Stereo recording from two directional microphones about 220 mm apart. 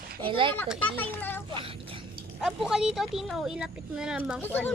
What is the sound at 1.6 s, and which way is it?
Speech, 25° right (ahead or behind).